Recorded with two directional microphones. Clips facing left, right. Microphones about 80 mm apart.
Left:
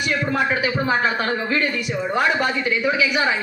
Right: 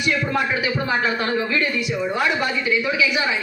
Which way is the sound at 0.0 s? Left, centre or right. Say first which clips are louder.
Even; left.